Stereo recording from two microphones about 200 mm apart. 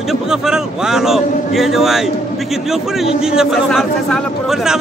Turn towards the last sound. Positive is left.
turn(degrees=0)  # may be behind; listen again after turning